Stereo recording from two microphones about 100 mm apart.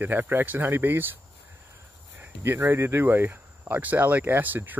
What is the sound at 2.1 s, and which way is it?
Speech, 25° right (ahead or behind).